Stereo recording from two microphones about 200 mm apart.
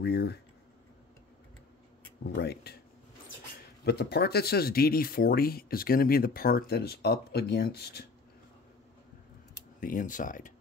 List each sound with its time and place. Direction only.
0.0 s speech: 55° left (ahead or behind)
2.2 s speech: 55° left (ahead or behind)
3.8 s speech: 55° left (ahead or behind)
9.8 s speech: 40° left (ahead or behind)